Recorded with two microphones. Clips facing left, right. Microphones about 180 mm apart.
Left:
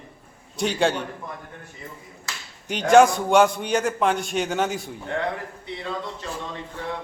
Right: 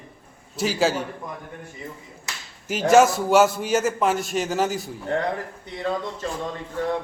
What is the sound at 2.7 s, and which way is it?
A man's voice, 5° right (ahead or behind).